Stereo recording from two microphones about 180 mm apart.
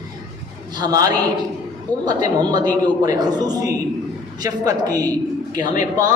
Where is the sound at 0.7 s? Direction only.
20° right (ahead or behind).